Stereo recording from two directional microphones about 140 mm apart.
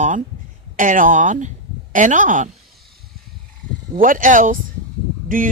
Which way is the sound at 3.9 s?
70° right (ahead or behind).